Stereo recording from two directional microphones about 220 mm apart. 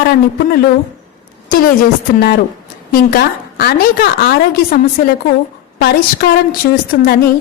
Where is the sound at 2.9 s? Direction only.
45° left (ahead or behind).